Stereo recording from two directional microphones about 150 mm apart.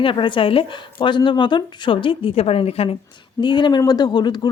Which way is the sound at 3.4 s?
30° left (ahead or behind).